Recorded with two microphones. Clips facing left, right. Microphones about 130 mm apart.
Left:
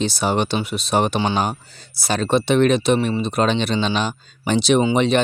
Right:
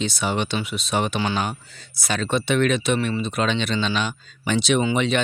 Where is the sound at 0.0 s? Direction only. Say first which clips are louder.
Left 4 dB; 35° left (ahead or behind).